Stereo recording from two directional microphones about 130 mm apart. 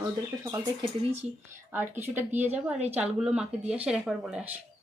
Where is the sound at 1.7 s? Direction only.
15° right (ahead or behind).